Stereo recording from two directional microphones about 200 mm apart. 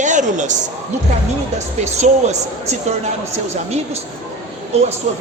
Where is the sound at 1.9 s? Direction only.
35° right (ahead or behind).